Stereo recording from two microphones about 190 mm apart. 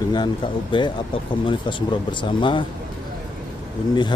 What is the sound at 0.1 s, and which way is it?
Speech, 25° left (ahead or behind).